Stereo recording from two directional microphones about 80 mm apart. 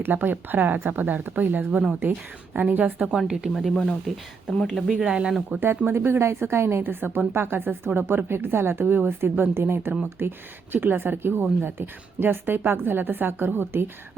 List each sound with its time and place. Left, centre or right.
0.0 s a woman's voice: right
3.1 s speech: centre
5.0 s speech: centre
5.5 s a woman's voice: right